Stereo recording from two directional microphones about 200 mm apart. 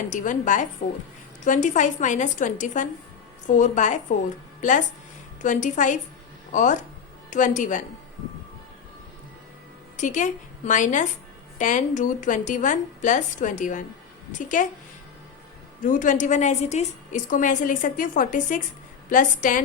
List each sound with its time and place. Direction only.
0.1 s a woman's voice: 40° left (ahead or behind)
5.4 s a woman's voice: 40° left (ahead or behind)
10.0 s a woman's voice: 35° left (ahead or behind)
15.8 s a woman's voice: 40° left (ahead or behind)